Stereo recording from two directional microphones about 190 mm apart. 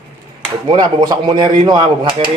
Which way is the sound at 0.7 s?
20° right (ahead or behind).